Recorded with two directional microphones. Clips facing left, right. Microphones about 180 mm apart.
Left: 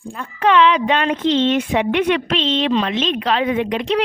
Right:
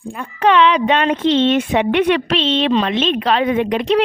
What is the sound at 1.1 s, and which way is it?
A child's voice, 65° right (ahead or behind).